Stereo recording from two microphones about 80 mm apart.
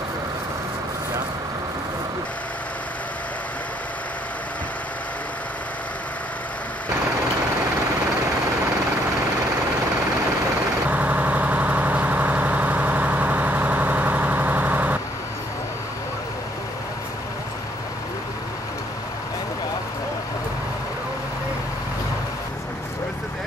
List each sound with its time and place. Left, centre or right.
10.9 s vehicle: centre